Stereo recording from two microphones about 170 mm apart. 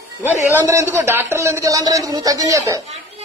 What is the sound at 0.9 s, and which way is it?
A woman's voice, 15° right (ahead or behind).